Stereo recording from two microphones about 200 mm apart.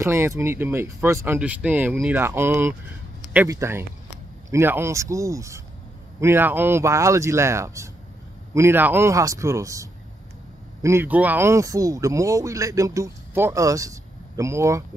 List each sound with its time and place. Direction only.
0.0 s speech: 10° right (ahead or behind)